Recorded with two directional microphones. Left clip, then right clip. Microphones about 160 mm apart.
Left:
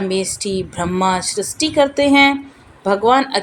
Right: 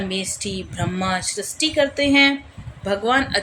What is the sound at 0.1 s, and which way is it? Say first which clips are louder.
Speech: left 6 dB; 20° left (ahead or behind).